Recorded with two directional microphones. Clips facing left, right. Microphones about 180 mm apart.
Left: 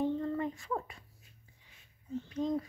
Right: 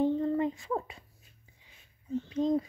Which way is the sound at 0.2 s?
20° right (ahead or behind).